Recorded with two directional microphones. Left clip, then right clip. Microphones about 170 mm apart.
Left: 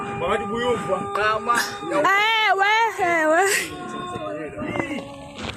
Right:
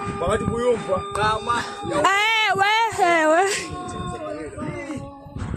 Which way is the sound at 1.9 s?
25° right (ahead or behind).